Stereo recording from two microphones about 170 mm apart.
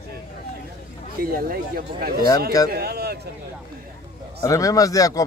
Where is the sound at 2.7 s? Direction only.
65° right (ahead or behind).